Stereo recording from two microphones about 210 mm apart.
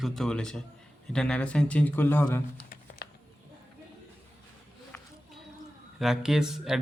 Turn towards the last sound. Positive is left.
turn(degrees=0)  # may be behind; listen again after turning